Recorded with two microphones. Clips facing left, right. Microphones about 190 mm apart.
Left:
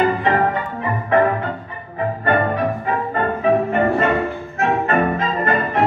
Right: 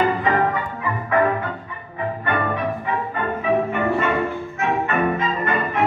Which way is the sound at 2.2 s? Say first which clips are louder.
Left 5 dB; 35° left (ahead or behind).